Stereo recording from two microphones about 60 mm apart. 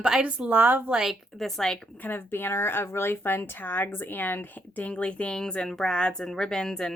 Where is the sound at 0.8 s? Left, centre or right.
Centre.